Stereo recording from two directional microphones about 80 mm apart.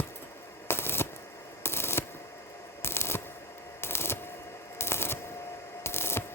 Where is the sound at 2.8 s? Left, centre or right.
Left.